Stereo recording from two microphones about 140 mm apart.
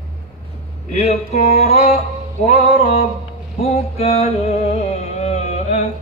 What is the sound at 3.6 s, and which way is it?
Music, 50° left (ahead or behind).